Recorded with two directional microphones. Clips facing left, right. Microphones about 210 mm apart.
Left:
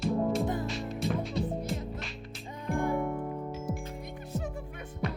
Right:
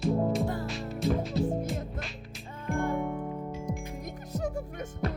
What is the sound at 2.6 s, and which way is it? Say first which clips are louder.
Music: even; 15° left (ahead or behind).